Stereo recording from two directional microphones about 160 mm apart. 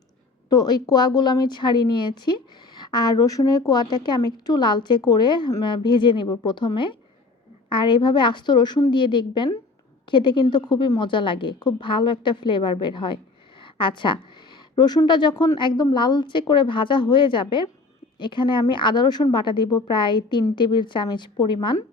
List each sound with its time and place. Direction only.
0.5 s a woman's voice: 25° left (ahead or behind)